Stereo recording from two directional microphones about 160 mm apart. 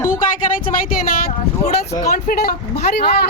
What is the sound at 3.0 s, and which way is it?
Speech, 85° left.